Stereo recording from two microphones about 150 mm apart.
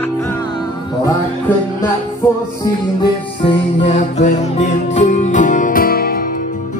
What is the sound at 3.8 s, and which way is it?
Music, 45° left (ahead or behind).